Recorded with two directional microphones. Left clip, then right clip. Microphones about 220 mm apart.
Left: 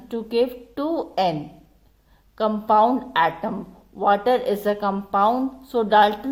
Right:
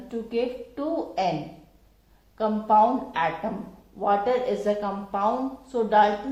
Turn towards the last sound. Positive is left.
turn(degrees=40)  # may be behind; listen again after turning